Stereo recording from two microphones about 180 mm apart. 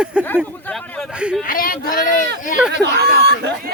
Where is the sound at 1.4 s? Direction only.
50° left (ahead or behind).